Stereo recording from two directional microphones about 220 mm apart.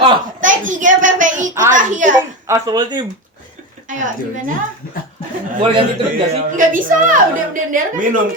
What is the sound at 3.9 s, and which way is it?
Speech, 35° right (ahead or behind).